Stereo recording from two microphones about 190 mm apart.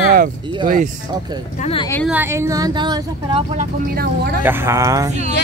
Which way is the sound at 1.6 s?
30° left (ahead or behind).